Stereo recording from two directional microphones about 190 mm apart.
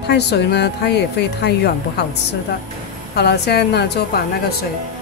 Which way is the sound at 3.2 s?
60° left (ahead or behind).